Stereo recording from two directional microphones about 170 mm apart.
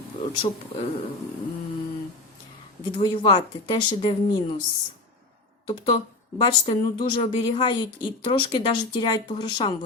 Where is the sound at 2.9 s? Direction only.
30° left (ahead or behind).